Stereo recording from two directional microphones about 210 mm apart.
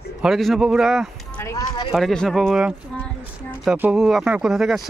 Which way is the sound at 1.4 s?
15° left (ahead or behind).